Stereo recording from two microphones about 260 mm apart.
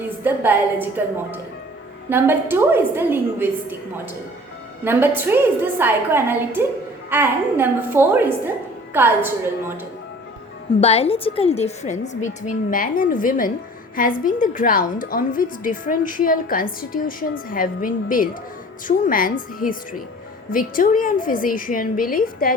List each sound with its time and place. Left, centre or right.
0.0 s a woman's voice: centre
10.8 s a woman's voice: left